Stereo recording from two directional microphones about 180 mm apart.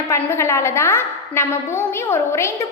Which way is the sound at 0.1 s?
15° left (ahead or behind).